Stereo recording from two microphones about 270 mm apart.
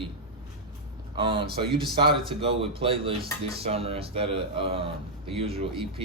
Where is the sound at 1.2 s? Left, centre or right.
Centre.